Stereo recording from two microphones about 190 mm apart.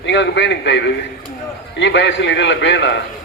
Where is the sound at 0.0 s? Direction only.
70° left (ahead or behind).